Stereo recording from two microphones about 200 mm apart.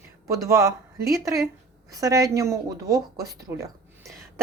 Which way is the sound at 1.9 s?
15° right (ahead or behind).